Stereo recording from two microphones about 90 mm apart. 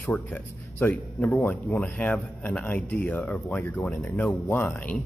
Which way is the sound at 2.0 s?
5° left (ahead or behind).